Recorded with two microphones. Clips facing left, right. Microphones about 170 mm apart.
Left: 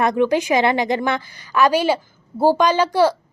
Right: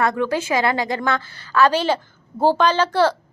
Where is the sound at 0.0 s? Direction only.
20° left (ahead or behind).